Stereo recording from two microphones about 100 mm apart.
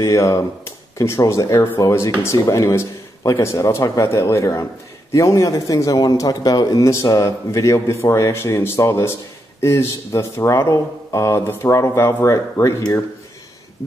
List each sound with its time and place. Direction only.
0.0 s a man's voice: 30° left (ahead or behind)